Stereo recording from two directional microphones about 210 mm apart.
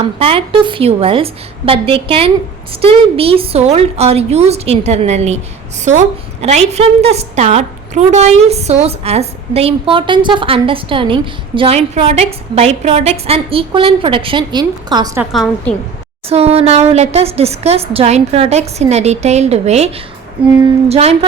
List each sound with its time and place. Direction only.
0.2 s a woman's voice: 25° right (ahead or behind)
6.4 s a woman's voice: 30° right (ahead or behind)
15.2 s a woman's voice: centre (ahead or behind)
16.3 s a woman's voice: 30° right (ahead or behind)
20.9 s a woman's voice: 30° right (ahead or behind)